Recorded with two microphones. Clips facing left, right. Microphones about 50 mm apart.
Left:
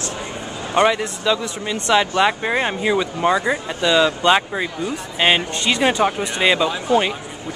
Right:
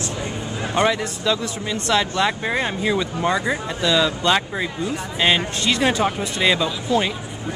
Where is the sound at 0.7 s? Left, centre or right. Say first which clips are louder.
Left 3 dB; centre.